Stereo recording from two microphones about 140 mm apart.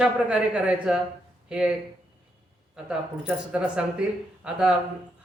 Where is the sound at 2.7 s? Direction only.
5° right (ahead or behind).